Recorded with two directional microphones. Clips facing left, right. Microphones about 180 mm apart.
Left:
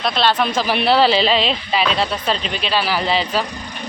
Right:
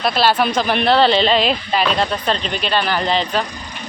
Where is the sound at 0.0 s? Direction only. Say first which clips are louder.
Right 2 dB; 5° right (ahead or behind).